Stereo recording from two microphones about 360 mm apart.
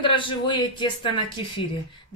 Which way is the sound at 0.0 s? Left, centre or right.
Centre.